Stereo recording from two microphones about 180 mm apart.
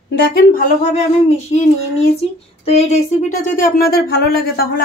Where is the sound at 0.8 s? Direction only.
40° left (ahead or behind).